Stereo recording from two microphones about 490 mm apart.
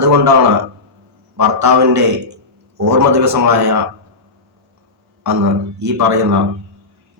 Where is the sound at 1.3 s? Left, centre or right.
Right.